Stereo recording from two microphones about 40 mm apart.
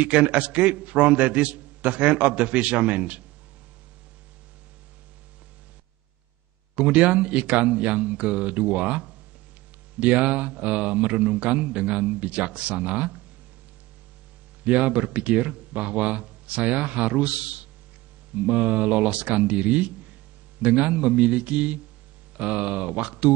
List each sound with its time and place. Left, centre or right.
0.0 s speech: right
6.7 s speech: right
14.6 s speech: right